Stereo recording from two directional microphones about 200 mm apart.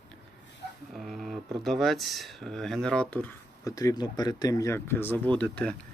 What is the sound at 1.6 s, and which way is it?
Speech, centre (ahead or behind).